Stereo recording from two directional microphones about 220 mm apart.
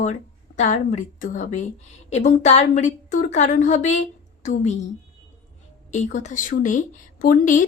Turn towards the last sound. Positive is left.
turn(degrees=40)  # may be behind; listen again after turning